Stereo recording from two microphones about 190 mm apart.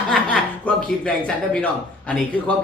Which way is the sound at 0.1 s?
5° left (ahead or behind).